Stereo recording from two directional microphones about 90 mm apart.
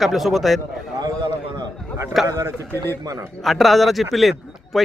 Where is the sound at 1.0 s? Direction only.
50° right (ahead or behind).